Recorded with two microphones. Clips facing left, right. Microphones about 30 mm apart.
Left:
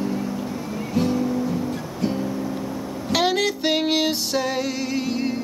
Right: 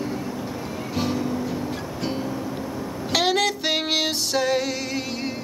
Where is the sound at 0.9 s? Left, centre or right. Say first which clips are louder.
Left 4 dB; right.